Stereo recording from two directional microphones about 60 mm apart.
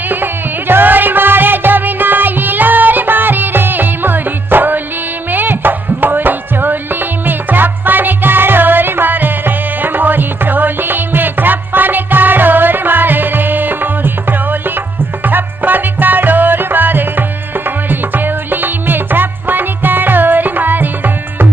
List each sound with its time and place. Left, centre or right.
0.1 s music: right
15.2 s music: right